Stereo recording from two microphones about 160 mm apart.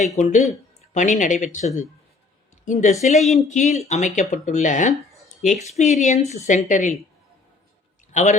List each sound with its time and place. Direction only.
0.0 s speech: 50° left (ahead or behind)
3.2 s speech: centre (ahead or behind)
3.5 s speech: 45° left (ahead or behind)
8.1 s a man's voice: 45° left (ahead or behind)